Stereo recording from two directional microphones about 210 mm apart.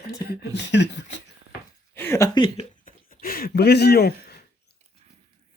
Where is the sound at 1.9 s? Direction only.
10° left (ahead or behind).